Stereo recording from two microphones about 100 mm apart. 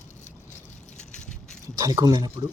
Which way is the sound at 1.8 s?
35° right (ahead or behind).